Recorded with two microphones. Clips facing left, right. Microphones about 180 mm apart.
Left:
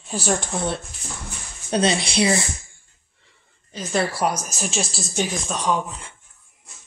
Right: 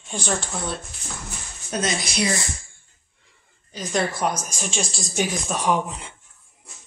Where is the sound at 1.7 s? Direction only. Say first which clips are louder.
Left 5 dB; 30° left (ahead or behind).